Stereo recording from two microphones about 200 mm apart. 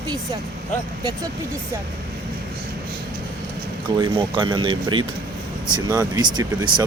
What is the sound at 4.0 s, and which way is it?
Speech, 25° right (ahead or behind).